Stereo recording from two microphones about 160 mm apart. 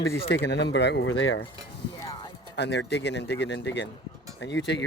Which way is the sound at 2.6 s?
90° left.